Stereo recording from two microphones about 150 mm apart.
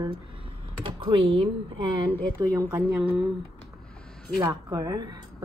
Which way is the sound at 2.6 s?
15° right (ahead or behind).